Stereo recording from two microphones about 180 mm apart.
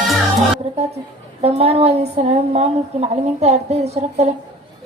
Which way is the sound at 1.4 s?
35° right (ahead or behind).